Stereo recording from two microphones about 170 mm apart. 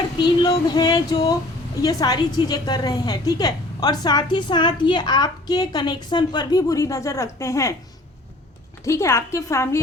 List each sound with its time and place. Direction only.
0.2 s a woman's voice: 25° left (ahead or behind)
8.8 s a woman's voice: 15° left (ahead or behind)